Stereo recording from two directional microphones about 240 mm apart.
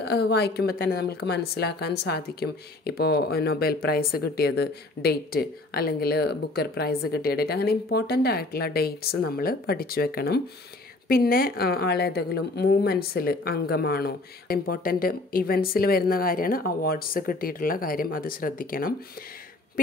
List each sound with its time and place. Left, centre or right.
0.0 s a woman's voice: left